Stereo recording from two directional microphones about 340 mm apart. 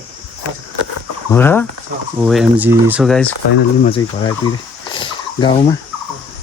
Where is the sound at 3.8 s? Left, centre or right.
Centre.